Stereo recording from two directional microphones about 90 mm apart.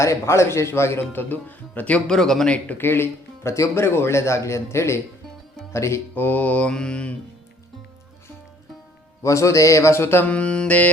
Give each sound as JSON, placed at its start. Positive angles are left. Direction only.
{"t": 0.0, "sound": "speech", "side_deg": 35}
{"t": 2.6, "sound": "speech", "side_deg": 25}
{"t": 5.7, "sound": "mantra", "side_deg": 30}
{"t": 9.2, "sound": "speech", "side_deg": 35}